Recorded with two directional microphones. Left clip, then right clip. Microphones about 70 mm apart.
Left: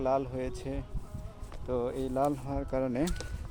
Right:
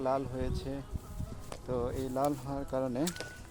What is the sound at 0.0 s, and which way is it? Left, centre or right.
Speech, left.